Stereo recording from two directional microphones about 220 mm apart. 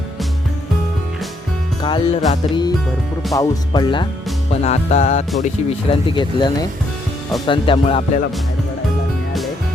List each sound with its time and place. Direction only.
1.8 s music: 20° left (ahead or behind)